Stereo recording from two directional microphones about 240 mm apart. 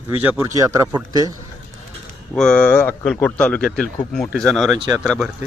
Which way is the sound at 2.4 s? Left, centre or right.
Centre.